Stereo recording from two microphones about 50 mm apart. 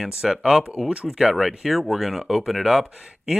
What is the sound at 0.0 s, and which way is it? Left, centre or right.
Speech, centre.